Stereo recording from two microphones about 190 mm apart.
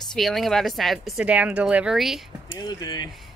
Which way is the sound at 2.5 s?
20° left (ahead or behind).